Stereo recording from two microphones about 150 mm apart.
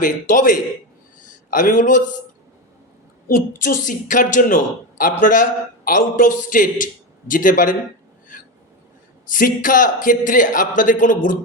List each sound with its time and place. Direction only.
0.0 s a woman's voice: 60° left (ahead or behind)
3.2 s a woman's voice: 75° left (ahead or behind)
9.2 s a woman's voice: 65° left (ahead or behind)